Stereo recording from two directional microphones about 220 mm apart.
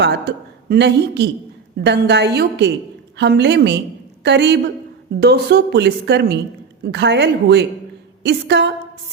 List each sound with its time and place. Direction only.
0.0 s a woman's voice: 50° right (ahead or behind)